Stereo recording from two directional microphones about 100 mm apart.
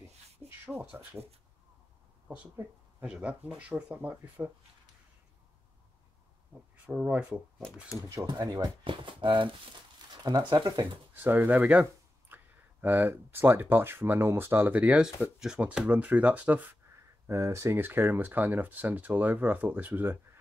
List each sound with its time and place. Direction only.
0.7 s speech: 20° right (ahead or behind)
3.0 s speech: 10° right (ahead or behind)
6.9 s speech: 10° right (ahead or behind)
8.3 s speech: 45° right (ahead or behind)
8.8 s speech: 55° right (ahead or behind)
10.2 s speech: 45° right (ahead or behind)
11.1 s speech: 20° right (ahead or behind)
17.3 s speech: 30° right (ahead or behind)